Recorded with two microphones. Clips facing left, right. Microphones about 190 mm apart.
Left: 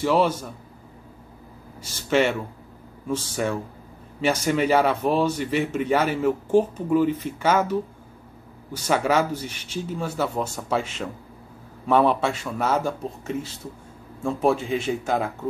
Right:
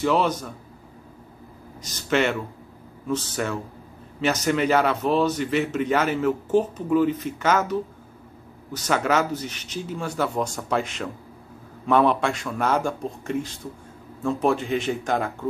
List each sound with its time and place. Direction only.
0.0 s speech: 10° left (ahead or behind)
1.8 s speech: 10° left (ahead or behind)
8.7 s a man's voice: 10° left (ahead or behind)